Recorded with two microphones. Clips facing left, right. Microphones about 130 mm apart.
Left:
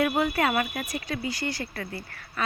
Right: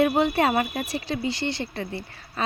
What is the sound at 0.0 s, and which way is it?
A woman's voice, 25° right (ahead or behind).